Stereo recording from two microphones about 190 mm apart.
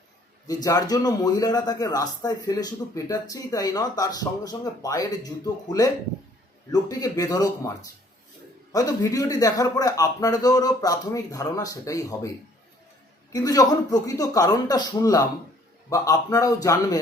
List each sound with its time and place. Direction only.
0.4 s a man's voice: 20° left (ahead or behind)
8.7 s a man's voice: 20° left (ahead or behind)
13.3 s a man's voice: 20° left (ahead or behind)